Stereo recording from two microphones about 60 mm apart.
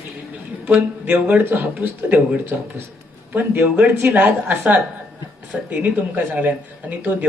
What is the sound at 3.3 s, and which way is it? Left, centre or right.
A woman's voice, right.